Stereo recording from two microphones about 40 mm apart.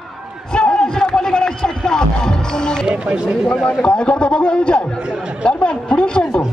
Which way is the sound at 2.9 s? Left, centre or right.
Right.